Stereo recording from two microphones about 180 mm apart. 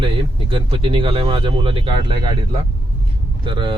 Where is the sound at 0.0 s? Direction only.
30° right (ahead or behind).